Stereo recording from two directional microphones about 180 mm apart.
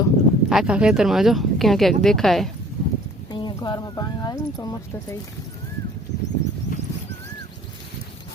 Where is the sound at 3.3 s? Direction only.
25° left (ahead or behind).